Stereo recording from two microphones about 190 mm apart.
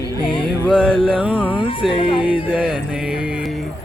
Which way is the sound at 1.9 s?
30° left (ahead or behind).